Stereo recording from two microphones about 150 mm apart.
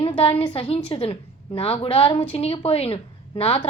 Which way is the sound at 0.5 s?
40° left (ahead or behind).